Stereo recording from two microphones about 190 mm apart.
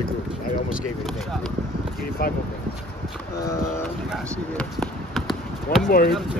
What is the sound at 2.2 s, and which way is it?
Speech, 50° left (ahead or behind).